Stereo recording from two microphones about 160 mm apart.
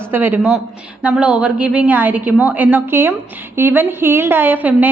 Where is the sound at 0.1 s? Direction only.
10° right (ahead or behind).